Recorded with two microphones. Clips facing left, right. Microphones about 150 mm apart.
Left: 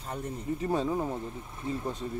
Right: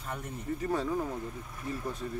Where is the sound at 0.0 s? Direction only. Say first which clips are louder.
Left 3 dB; 30° left (ahead or behind).